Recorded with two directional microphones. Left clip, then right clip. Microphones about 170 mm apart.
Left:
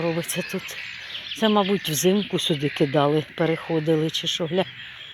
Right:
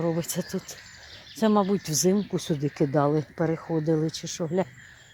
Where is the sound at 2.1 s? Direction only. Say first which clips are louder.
Left 3 dB; 5° left (ahead or behind).